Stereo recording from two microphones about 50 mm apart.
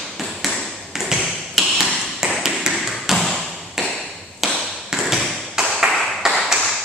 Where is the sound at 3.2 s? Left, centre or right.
Centre.